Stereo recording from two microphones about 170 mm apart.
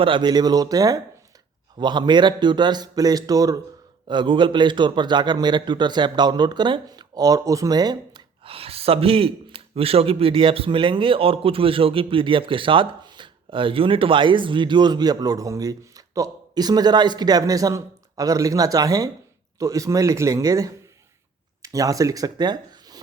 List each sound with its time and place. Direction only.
0.0 s a man's voice: 25° right (ahead or behind)